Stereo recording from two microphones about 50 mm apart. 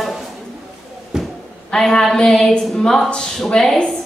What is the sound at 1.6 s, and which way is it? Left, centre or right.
Speech, centre.